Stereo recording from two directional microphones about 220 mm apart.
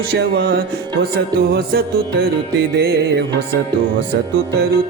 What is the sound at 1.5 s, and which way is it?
Music, 45° right (ahead or behind).